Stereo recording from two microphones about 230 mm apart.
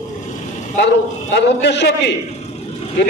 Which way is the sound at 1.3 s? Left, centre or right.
Left.